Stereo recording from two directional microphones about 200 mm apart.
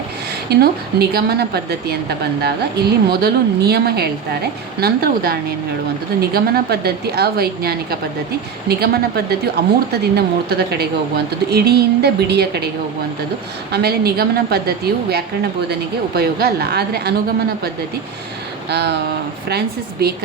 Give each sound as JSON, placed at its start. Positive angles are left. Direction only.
{"t": 0.5, "sound": "a woman's voice", "side_deg": -50}
{"t": 13.7, "sound": "a woman's voice", "side_deg": -55}
{"t": 18.7, "sound": "a woman's voice", "side_deg": -55}